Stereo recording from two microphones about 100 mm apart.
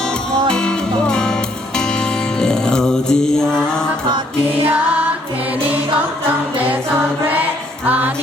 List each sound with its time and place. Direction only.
0.5 s music: 10° left (ahead or behind)
7.9 s music: 15° right (ahead or behind)